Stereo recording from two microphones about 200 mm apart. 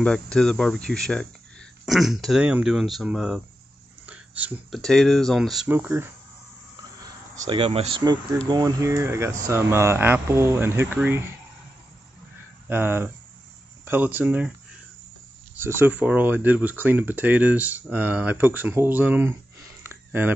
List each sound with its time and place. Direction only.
0.0 s speech: 5° left (ahead or behind)
7.4 s speech: 25° right (ahead or behind); by 11.2 s 10° right (ahead or behind)
12.6 s speech: 10° right (ahead or behind)
15.6 s speech: 10° right (ahead or behind)
19.9 s a sound: 10° right (ahead or behind)